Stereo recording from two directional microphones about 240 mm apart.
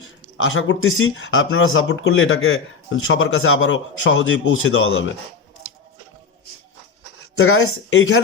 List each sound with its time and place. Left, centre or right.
0.3 s speech: left
7.3 s speech: left